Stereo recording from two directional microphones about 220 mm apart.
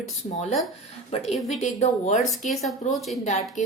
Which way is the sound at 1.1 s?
25° left (ahead or behind).